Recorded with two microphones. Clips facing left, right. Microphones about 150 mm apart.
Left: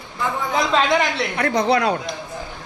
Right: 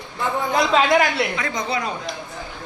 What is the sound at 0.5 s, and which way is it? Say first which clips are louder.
Speech: right 1 dB; centre (ahead or behind).